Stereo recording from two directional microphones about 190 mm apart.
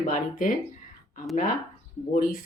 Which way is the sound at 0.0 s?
45° left (ahead or behind).